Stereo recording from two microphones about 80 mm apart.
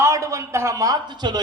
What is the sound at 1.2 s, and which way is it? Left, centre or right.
Speech, right.